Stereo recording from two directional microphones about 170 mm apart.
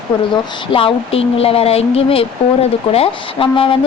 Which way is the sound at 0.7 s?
30° left (ahead or behind).